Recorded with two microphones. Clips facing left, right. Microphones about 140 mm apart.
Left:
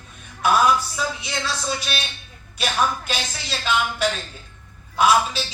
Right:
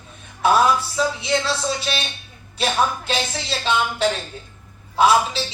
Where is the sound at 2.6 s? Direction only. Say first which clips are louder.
Right 2 dB; 25° right (ahead or behind).